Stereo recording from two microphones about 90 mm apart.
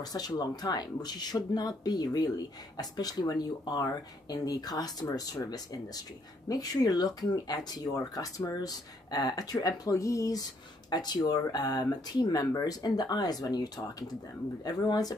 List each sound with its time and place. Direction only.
0.0 s speech: 45° left (ahead or behind)
10.9 s speech: 50° left (ahead or behind)